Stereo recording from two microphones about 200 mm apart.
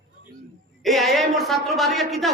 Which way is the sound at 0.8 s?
Centre (ahead or behind).